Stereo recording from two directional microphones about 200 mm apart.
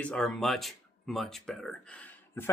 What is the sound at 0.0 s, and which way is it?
Speech, 5° left (ahead or behind).